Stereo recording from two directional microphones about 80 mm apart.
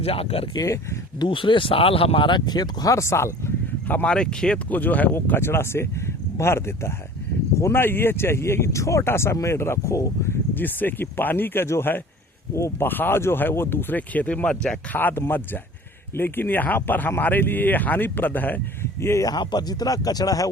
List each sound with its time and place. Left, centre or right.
0.5 s speech: left
1.2 s speech: left
2.1 s speech: left
2.9 s speech: left
3.8 s speech: left
4.1 s speech: centre; by 10.3 s left
10.5 s speech: left
12.9 s speech: left; by 14.8 s centre
14.9 s speech: left
19.0 s speech: left
19.3 s speech: left